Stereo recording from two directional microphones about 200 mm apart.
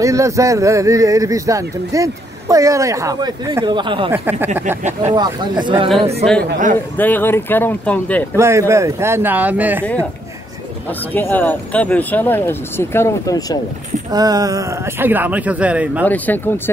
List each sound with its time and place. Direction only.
0.0 s speech: 15° right (ahead or behind)
4.1 s speech: 10° right (ahead or behind)
5.1 s speech: 20° right (ahead or behind)
7.0 s speech: 10° left (ahead or behind)
8.4 s speech: 15° right (ahead or behind)
11.1 s speech: 10° left (ahead or behind)
14.1 s speech: 20° right (ahead or behind)
16.1 s speech: 10° left (ahead or behind)